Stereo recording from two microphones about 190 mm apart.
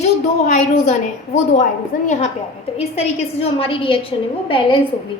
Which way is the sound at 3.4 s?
30° left (ahead or behind).